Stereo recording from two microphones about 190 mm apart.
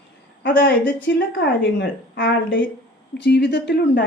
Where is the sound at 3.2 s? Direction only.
60° left (ahead or behind).